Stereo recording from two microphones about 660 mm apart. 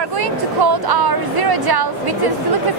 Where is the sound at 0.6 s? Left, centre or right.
Right.